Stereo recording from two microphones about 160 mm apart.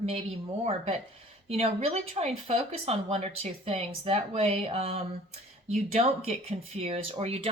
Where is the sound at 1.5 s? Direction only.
40° right (ahead or behind).